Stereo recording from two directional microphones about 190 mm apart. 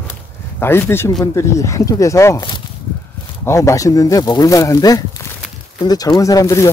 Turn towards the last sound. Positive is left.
turn(degrees=15)  # may be behind; listen again after turning